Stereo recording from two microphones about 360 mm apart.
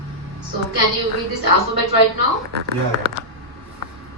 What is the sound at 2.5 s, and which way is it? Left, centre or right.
Speech, right.